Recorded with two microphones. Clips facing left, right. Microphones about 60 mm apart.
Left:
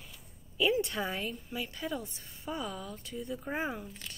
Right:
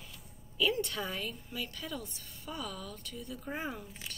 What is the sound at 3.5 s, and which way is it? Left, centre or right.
Speech, centre.